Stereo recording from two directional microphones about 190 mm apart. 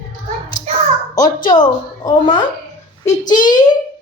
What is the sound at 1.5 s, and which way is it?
Speech, 20° left (ahead or behind).